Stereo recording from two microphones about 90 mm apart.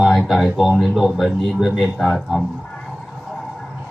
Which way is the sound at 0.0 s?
Centre (ahead or behind).